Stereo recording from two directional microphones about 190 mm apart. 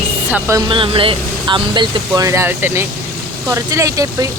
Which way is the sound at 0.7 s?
25° right (ahead or behind).